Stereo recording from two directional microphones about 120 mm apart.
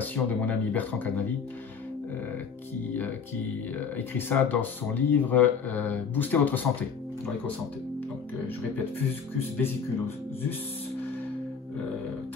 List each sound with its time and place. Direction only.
0.0 s speech: 15° left (ahead or behind)
3.7 s speech: 15° left (ahead or behind)
9.4 s speech: 20° left (ahead or behind)